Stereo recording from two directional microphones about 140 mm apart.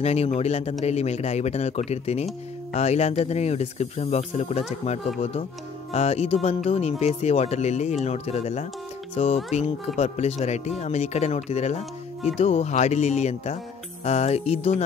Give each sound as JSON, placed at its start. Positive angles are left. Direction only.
{"t": 0.0, "sound": "speech", "side_deg": 50}